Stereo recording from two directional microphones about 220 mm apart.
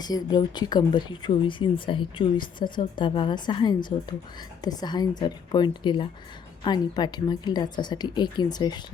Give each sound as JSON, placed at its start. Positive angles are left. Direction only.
{"t": 0.0, "sound": "speech", "side_deg": 20}